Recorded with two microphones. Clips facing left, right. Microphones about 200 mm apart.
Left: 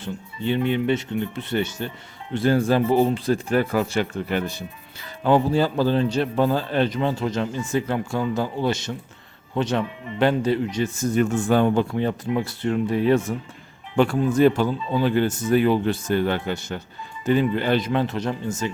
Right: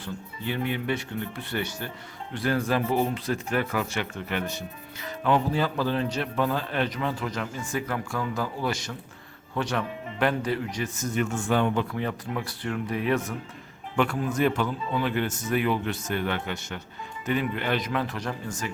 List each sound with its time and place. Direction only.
0.0 s speech: 25° left (ahead or behind)